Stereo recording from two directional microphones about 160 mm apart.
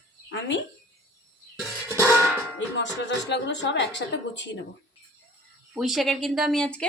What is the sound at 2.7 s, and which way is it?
Speech, 90° left.